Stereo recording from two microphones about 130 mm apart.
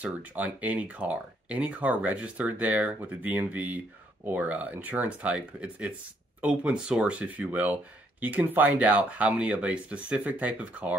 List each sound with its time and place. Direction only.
0.0 s speech: 10° right (ahead or behind)